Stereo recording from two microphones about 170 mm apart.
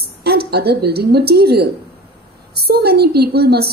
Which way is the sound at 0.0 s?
70° right (ahead or behind).